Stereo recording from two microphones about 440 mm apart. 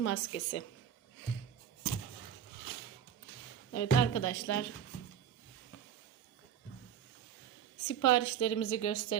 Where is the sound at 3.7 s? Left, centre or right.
Left.